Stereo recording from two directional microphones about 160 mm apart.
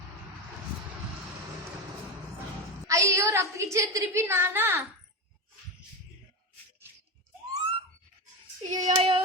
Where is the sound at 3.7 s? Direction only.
20° right (ahead or behind).